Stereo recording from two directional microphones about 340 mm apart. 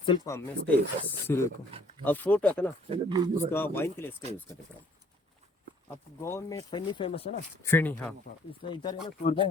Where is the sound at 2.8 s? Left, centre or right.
Centre.